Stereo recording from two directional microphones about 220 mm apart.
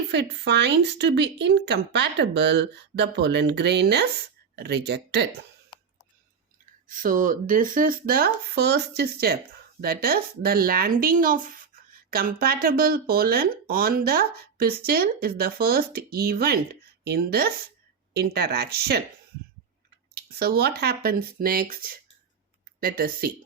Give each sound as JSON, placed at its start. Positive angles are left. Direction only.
{"t": 0.1, "sound": "speech", "side_deg": -50}
{"t": 6.8, "sound": "speech", "side_deg": -40}
{"t": 20.1, "sound": "speech", "side_deg": -45}